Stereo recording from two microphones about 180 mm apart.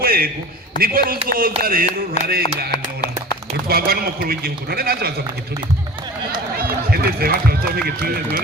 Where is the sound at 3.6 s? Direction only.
60° right (ahead or behind).